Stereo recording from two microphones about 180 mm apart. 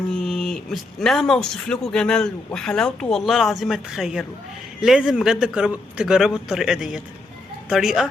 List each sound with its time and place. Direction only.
0.1 s speech: 5° left (ahead or behind)